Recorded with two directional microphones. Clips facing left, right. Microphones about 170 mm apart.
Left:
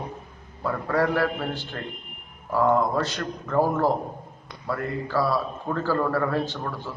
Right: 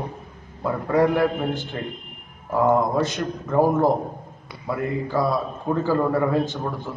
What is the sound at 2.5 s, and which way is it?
A man's voice, 15° right (ahead or behind).